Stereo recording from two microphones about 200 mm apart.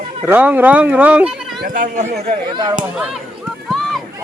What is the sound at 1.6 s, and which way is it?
Speech, 45° right (ahead or behind).